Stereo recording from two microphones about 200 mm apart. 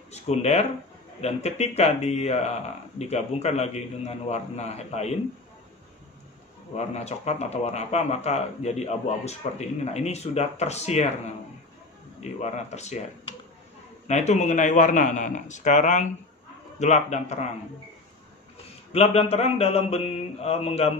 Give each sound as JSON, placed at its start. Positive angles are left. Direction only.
{"t": 0.1, "sound": "speech", "side_deg": 35}
{"t": 6.8, "sound": "speech", "side_deg": 35}
{"t": 14.0, "sound": "speech", "side_deg": 35}
{"t": 18.9, "sound": "speech", "side_deg": 30}